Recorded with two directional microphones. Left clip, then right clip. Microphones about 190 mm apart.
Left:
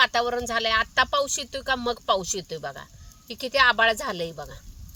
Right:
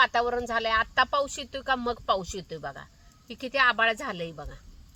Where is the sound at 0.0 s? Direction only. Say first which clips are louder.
Left 2 dB; 5° left (ahead or behind); by 4.6 s 40° left (ahead or behind).